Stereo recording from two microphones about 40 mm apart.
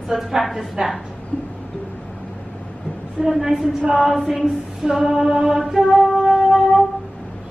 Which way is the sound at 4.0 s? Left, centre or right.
Centre.